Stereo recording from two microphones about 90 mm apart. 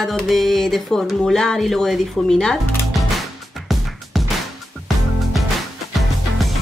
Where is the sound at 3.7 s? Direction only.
Centre (ahead or behind).